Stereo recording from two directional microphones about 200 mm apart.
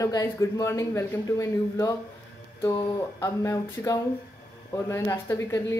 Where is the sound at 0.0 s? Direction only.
15° left (ahead or behind).